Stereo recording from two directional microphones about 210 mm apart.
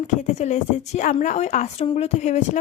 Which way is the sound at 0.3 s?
35° left (ahead or behind).